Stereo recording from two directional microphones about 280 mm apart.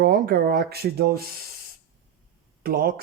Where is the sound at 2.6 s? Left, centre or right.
Right.